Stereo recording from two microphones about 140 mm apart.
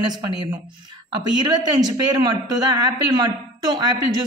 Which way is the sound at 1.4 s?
30° right (ahead or behind).